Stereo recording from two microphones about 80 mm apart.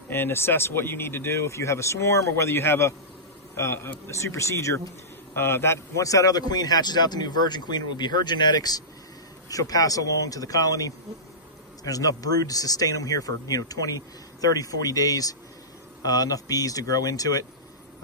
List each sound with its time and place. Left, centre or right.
0.1 s a man's voice: left